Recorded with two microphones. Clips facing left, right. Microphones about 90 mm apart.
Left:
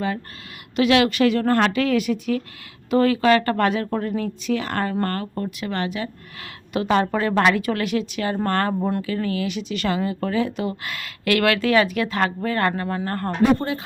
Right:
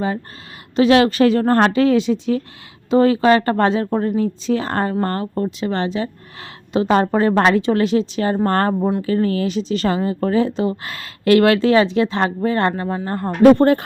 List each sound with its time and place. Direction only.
0.8 s speech: 35° right (ahead or behind); by 13.3 s 15° right (ahead or behind)
13.4 s speech: 60° right (ahead or behind)